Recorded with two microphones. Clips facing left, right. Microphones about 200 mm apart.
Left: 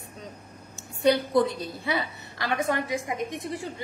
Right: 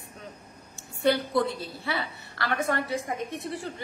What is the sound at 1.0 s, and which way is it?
A woman's voice, 20° left (ahead or behind).